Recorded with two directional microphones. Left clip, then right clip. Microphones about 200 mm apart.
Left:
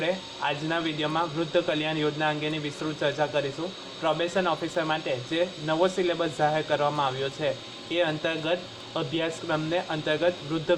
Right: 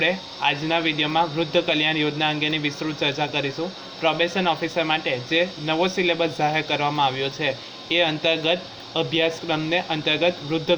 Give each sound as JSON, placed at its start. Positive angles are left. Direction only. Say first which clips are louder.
{"t": 0.0, "sound": "speech", "louder": "right 6 dB", "side_deg": -30}